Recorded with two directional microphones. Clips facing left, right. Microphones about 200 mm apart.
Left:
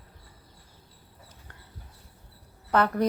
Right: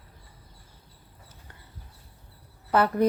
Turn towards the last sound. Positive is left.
turn(degrees=-5)  # may be behind; listen again after turning